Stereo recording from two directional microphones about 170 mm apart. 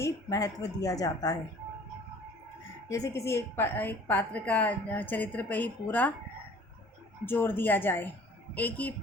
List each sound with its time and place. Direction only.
0.0 s a woman's voice: 20° left (ahead or behind)
2.9 s a woman's voice: 20° left (ahead or behind)
7.3 s a woman's voice: 10° left (ahead or behind)